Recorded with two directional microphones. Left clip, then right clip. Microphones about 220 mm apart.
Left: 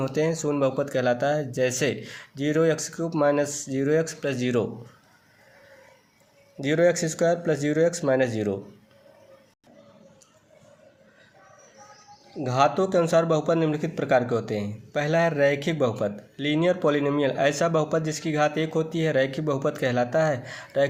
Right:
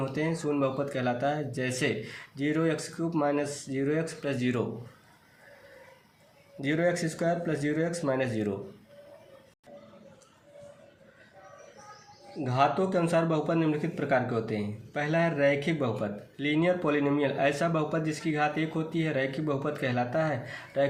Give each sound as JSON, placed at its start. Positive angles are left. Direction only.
{"t": 0.0, "sound": "speech", "side_deg": 50}
{"t": 6.6, "sound": "speech", "side_deg": 45}
{"t": 12.4, "sound": "speech", "side_deg": 50}